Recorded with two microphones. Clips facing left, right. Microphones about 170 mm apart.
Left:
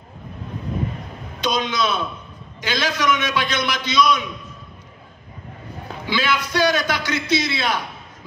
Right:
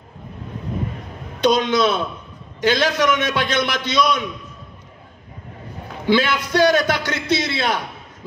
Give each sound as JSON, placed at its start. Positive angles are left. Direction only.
{"t": 1.4, "sound": "a man's voice", "side_deg": -60}
{"t": 6.0, "sound": "a man's voice", "side_deg": -55}